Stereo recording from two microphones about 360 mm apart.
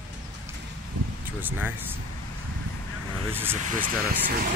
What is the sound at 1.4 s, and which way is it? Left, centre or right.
Speech, centre.